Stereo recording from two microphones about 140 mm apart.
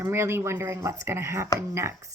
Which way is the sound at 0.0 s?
20° right (ahead or behind).